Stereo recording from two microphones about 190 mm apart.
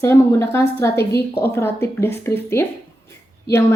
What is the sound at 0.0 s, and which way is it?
A woman's voice, 15° left (ahead or behind).